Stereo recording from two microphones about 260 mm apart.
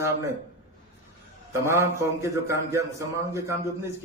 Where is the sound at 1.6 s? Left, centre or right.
Centre.